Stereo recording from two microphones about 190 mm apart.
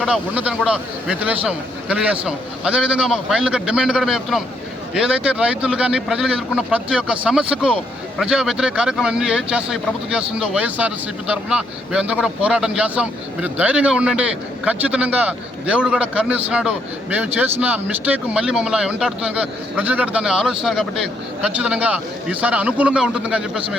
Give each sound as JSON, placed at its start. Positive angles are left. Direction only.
{"t": 0.0, "sound": "a man's voice", "side_deg": -5}